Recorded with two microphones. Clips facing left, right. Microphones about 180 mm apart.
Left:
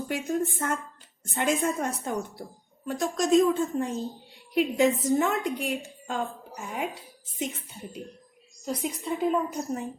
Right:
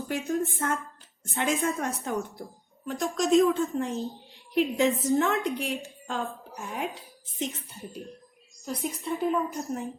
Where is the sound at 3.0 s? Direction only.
Centre (ahead or behind).